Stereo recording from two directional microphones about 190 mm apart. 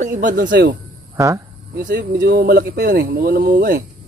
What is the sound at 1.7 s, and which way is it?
Speech, 60° right (ahead or behind).